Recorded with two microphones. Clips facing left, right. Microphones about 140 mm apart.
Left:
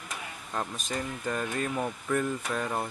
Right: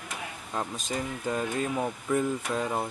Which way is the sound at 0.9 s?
10° right (ahead or behind).